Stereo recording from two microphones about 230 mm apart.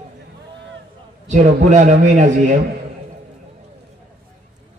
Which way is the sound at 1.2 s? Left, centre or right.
Right.